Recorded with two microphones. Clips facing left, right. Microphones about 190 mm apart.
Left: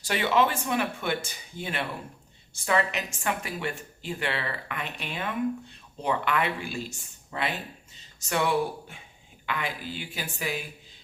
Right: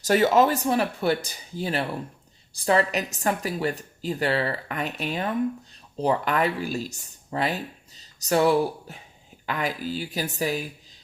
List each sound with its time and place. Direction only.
0.0 s speech: 40° right (ahead or behind)